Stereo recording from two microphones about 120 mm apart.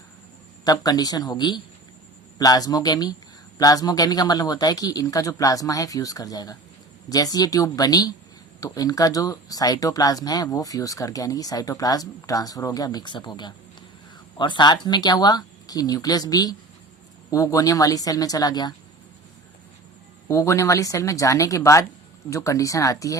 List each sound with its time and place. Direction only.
0.6 s speech: 35° left (ahead or behind)
20.2 s speech: 25° left (ahead or behind)